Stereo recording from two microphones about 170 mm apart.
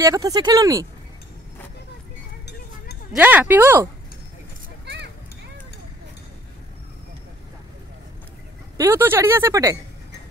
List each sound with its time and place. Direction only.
0.0 s speech: 20° right (ahead or behind)
3.1 s speech: 10° right (ahead or behind)
4.8 s a sound: 80° right
8.7 s speech: 15° right (ahead or behind)